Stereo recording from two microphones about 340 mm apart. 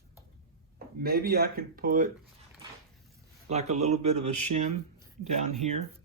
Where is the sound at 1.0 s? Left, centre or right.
Right.